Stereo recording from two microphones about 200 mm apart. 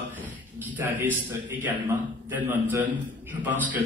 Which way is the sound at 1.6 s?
10° right (ahead or behind).